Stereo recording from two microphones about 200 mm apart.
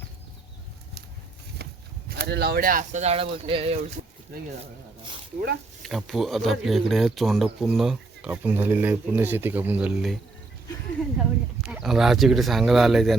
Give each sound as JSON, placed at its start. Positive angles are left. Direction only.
{"t": 2.0, "sound": "speech", "side_deg": -50}
{"t": 5.8, "sound": "speech", "side_deg": 0}
{"t": 11.2, "sound": "speech", "side_deg": -5}